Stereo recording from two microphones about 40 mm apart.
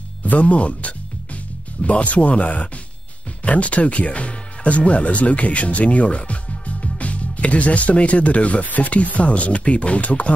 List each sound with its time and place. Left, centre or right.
0.2 s speech: left